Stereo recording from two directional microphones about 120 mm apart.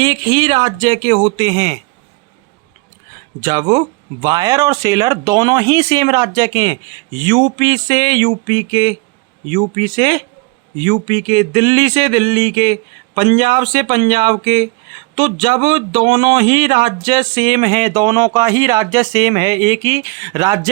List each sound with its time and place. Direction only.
0.0 s speech: 40° right (ahead or behind)
3.4 s speech: 35° right (ahead or behind)
7.2 s speech: 45° right (ahead or behind)